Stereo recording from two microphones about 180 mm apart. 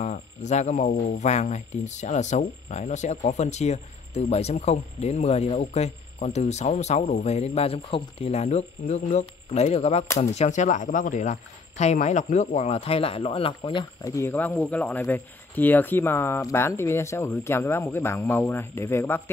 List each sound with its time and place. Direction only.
0.0 s speech: 40° left (ahead or behind); by 19.2 s 10° left (ahead or behind)